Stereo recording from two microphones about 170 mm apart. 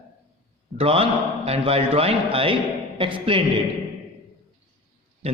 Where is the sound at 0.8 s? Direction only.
35° right (ahead or behind).